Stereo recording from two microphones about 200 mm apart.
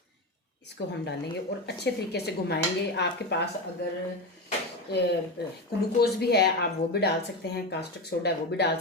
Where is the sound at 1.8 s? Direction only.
55° left (ahead or behind).